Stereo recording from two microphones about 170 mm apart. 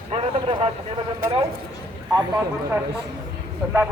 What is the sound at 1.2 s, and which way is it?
Speech, 55° right (ahead or behind).